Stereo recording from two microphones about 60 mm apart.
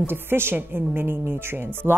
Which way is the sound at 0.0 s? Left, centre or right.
Right.